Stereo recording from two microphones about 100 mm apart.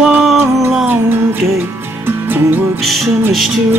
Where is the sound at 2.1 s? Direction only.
20° right (ahead or behind).